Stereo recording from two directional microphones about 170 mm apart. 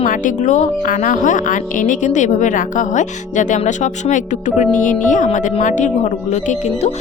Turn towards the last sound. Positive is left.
turn(degrees=40)  # may be behind; listen again after turning